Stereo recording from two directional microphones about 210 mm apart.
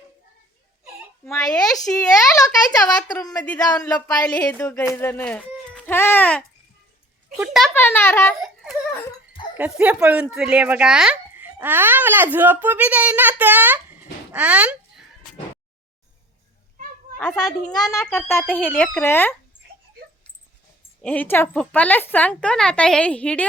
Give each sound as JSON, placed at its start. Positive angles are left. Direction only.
{"t": 1.2, "sound": "speech", "side_deg": 5}
{"t": 3.3, "sound": "a woman's voice", "side_deg": 5}
{"t": 7.7, "sound": "speech", "side_deg": 10}
{"t": 9.6, "sound": "speech", "side_deg": -5}
{"t": 17.2, "sound": "speech", "side_deg": 5}
{"t": 21.0, "sound": "a woman's voice", "side_deg": 5}